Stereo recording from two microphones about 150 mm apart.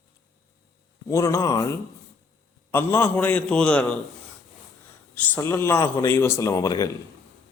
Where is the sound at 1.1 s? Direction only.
20° left (ahead or behind).